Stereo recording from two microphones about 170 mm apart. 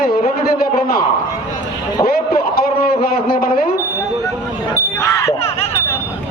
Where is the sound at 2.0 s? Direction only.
60° left (ahead or behind).